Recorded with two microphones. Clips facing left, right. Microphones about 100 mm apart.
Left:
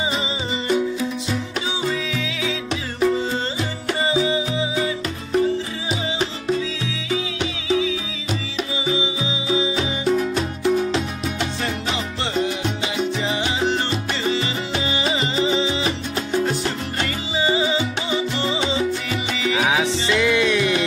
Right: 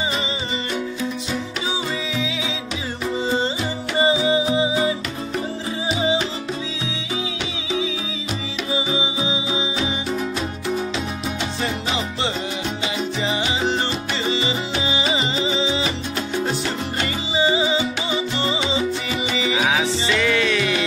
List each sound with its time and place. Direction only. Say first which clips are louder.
3.9 s music: right 2 dB; 15° right (ahead or behind)
8.9 s music: even; 20° right (ahead or behind)
12.9 s salsa music: even; 5° right (ahead or behind)
14.2 s music: right 2 dB; 10° right (ahead or behind)
17.4 s music: right 1 dB; 5° right (ahead or behind)
19.6 s music: left 2 dB; 5° left (ahead or behind)